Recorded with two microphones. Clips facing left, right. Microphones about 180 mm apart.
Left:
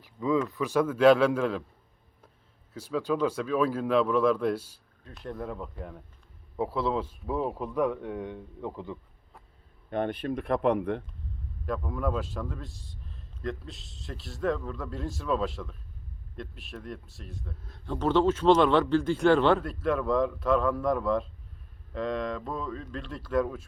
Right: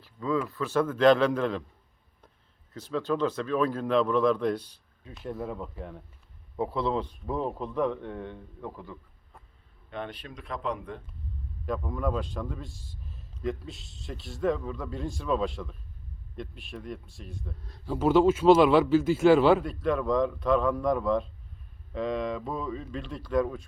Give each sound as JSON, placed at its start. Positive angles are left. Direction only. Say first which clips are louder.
{"t": 0.0, "sound": "speech", "louder": "left 2 dB", "side_deg": 15}
{"t": 2.7, "sound": "speech", "louder": "even", "side_deg": 10}
{"t": 5.0, "sound": "speech", "louder": "right 1 dB", "side_deg": -5}
{"t": 9.9, "sound": "speech", "louder": "left 9 dB", "side_deg": 50}
{"t": 11.6, "sound": "speech", "louder": "even", "side_deg": 0}